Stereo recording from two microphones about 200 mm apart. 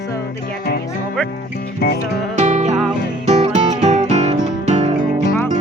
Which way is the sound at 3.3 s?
35° right (ahead or behind).